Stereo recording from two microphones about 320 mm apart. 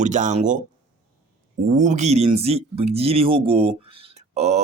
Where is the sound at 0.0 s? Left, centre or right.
Right.